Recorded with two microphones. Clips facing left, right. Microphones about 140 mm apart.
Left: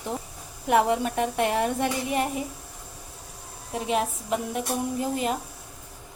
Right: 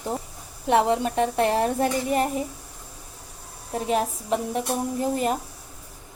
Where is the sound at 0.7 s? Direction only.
25° right (ahead or behind).